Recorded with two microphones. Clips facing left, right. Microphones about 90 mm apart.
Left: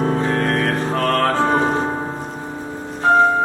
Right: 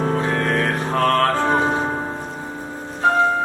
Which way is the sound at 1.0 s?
Centre (ahead or behind).